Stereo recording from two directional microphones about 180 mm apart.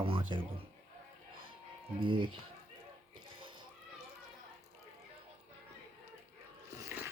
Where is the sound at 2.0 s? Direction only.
30° right (ahead or behind).